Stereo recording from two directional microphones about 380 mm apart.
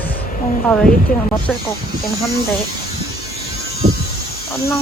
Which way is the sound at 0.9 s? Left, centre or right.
Left.